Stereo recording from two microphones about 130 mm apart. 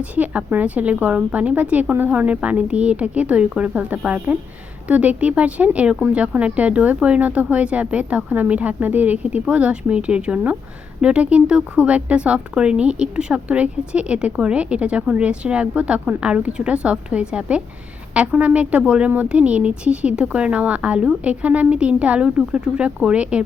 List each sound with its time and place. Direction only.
0.0 s speech: 10° right (ahead or behind)